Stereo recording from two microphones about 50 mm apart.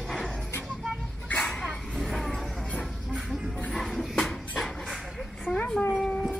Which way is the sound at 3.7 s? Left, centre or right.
Centre.